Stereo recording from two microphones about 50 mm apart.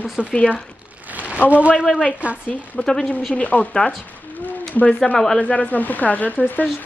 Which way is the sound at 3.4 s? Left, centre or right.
Left.